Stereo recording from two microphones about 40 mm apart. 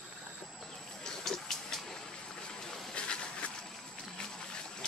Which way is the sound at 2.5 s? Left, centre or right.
Centre.